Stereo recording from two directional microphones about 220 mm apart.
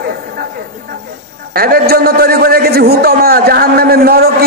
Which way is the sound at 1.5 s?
45° right (ahead or behind).